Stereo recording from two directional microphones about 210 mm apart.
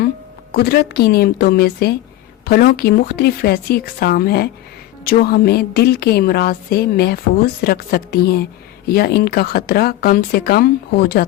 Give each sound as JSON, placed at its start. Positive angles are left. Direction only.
{"t": 0.5, "sound": "a woman's voice", "side_deg": 50}